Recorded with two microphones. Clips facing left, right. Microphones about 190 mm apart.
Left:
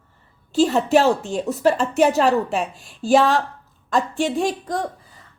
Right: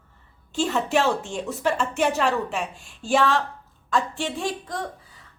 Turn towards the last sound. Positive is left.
turn(degrees=45)  # may be behind; listen again after turning